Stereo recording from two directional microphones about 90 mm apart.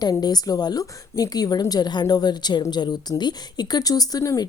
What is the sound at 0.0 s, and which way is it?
A woman's voice, 50° left (ahead or behind).